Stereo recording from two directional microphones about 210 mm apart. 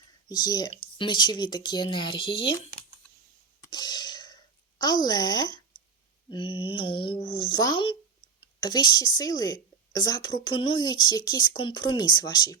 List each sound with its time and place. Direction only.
0.3 s a woman's voice: 20° left (ahead or behind)
3.6 s a sound: 20° left (ahead or behind)
6.3 s a woman's voice: 25° left (ahead or behind)